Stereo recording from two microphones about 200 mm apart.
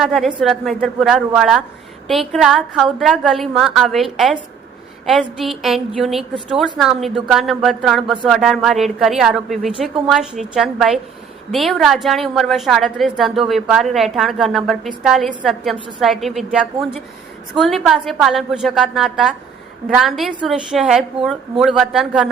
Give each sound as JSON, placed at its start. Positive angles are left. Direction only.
{"t": 0.0, "sound": "speech", "side_deg": 0}